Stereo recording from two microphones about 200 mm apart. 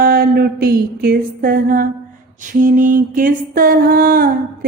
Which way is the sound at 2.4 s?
40° right (ahead or behind).